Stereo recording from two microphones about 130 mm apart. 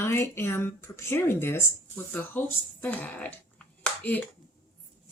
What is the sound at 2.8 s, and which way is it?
Speech, 10° left (ahead or behind).